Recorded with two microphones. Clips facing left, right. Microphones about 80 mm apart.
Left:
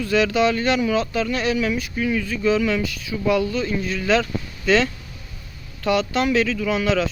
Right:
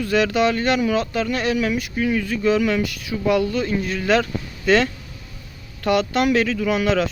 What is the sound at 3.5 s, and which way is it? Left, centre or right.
Speech, right.